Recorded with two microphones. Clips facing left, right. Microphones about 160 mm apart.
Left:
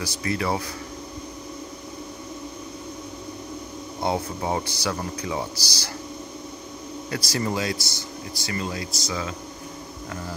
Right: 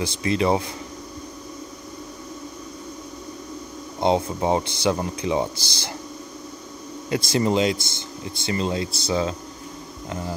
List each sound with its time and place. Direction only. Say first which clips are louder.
0.0 s speech: right 5 dB; 20° right (ahead or behind)
4.0 s speech: right 5 dB; 20° right (ahead or behind)
7.1 s speech: right 6 dB; 20° right (ahead or behind)